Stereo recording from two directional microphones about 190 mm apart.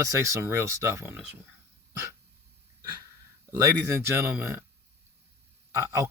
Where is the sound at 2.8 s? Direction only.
20° right (ahead or behind).